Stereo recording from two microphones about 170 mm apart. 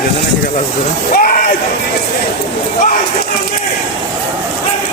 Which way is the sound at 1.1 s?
55° left (ahead or behind).